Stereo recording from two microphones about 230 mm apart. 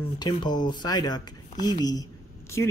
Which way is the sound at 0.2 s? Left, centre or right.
Centre.